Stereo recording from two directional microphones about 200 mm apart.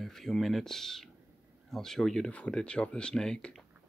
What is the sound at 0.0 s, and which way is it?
Speech, centre (ahead or behind).